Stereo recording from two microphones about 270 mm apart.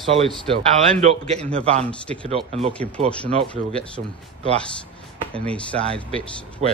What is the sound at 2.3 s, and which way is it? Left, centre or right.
Speech, right.